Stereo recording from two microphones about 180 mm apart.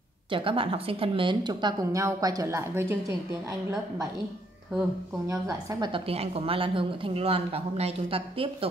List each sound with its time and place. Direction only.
0.3 s speech: 30° right (ahead or behind); by 3.0 s 15° right (ahead or behind)
5.3 s a woman's voice: 20° right (ahead or behind)